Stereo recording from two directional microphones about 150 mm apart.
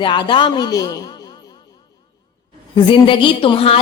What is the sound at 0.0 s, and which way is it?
A man's voice, 30° left (ahead or behind).